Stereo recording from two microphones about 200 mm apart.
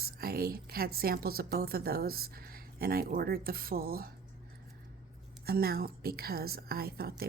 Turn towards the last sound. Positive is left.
turn(degrees=-50)  # may be behind; listen again after turning